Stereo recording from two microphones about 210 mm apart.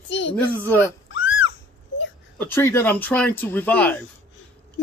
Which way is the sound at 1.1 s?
65° left (ahead or behind).